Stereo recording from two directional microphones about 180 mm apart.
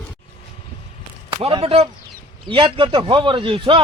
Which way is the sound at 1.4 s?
35° right (ahead or behind).